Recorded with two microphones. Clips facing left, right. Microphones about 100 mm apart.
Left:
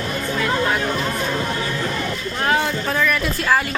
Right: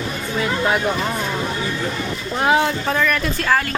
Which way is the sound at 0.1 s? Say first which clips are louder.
Left 1 dB; 10° right (ahead or behind).